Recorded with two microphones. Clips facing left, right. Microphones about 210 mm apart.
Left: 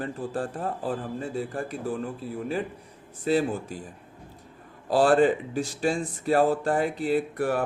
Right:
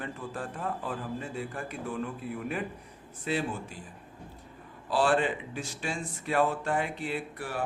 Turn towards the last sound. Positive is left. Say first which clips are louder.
# left 9 dB
turn(degrees=50)  # may be behind; listen again after turning